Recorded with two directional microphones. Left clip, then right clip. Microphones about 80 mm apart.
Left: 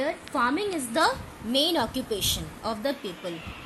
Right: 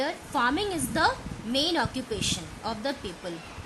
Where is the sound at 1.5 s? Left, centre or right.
Left.